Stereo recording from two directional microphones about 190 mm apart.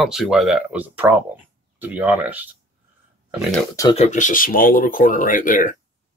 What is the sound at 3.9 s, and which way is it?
Speech, 35° left (ahead or behind).